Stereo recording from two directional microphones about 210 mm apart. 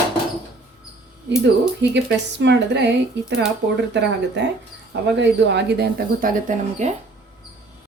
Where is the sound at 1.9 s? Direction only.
55° right (ahead or behind); by 6.9 s 40° right (ahead or behind).